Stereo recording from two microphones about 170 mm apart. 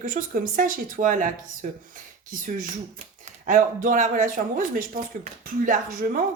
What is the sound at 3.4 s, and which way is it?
Speech, 50° right (ahead or behind).